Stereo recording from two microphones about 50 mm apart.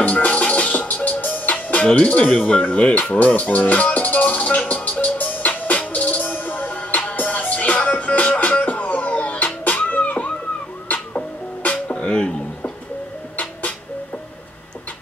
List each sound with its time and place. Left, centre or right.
0.0 s music: left
13.4 s music: left